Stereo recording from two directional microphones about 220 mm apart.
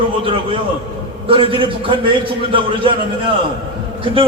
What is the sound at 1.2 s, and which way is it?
A man's voice, 25° right (ahead or behind).